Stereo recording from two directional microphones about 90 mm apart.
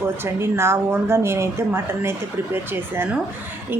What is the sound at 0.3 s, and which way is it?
Speech, 30° right (ahead or behind).